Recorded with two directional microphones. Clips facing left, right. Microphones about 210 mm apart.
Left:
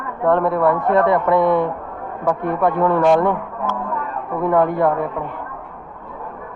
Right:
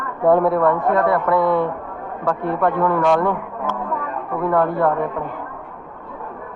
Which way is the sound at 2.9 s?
25° left (ahead or behind).